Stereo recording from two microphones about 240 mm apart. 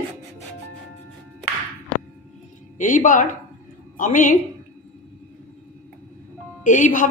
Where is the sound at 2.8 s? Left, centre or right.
Left.